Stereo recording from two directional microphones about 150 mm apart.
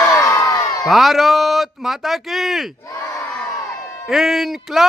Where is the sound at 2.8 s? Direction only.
20° left (ahead or behind).